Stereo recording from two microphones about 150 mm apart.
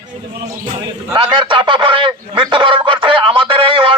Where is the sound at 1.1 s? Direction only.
30° right (ahead or behind).